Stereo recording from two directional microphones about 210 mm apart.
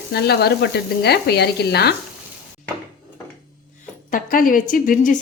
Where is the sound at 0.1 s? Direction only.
50° left (ahead or behind).